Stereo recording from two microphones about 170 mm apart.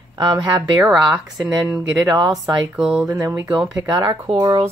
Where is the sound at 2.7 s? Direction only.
5° right (ahead or behind).